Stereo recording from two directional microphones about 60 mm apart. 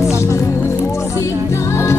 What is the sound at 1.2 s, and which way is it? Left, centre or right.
Music, left.